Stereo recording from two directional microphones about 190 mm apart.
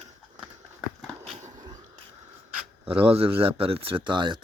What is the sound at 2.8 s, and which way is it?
Speech, 30° right (ahead or behind).